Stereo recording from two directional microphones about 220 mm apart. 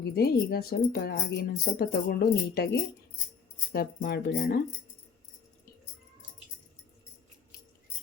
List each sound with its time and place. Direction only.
0.0 s speech: 45° left (ahead or behind)
3.7 s speech: 45° left (ahead or behind)